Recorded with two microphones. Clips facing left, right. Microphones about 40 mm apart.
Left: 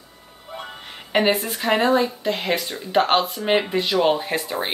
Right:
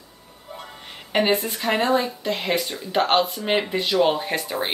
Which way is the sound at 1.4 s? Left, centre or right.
Centre.